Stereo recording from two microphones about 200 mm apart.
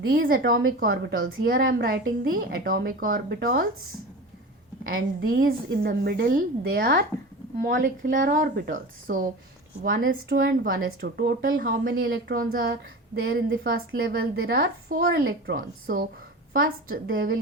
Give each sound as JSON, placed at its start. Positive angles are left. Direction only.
{"t": 0.4, "sound": "a woman's voice", "side_deg": -80}
{"t": 0.8, "sound": "a woman's voice", "side_deg": -50}
{"t": 4.9, "sound": "a woman's voice", "side_deg": -45}